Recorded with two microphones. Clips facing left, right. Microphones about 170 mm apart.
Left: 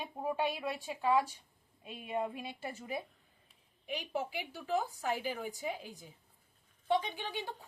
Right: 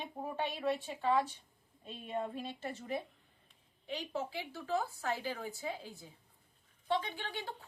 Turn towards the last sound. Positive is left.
turn(degrees=15)  # may be behind; listen again after turning